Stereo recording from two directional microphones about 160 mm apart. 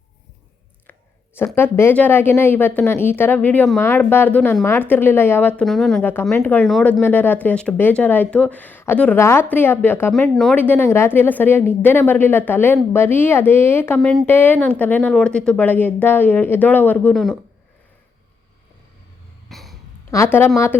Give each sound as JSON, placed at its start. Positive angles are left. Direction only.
{"t": 1.5, "sound": "speech", "side_deg": 15}
{"t": 5.6, "sound": "speech", "side_deg": 0}
{"t": 6.0, "sound": "speech", "side_deg": 10}
{"t": 6.7, "sound": "speech", "side_deg": 0}
{"t": 7.0, "sound": "speech", "side_deg": 10}
{"t": 10.1, "sound": "speech", "side_deg": 0}
{"t": 10.5, "sound": "speech", "side_deg": 10}
{"t": 19.5, "sound": "cough", "side_deg": 0}
{"t": 20.1, "sound": "a woman's voice", "side_deg": 20}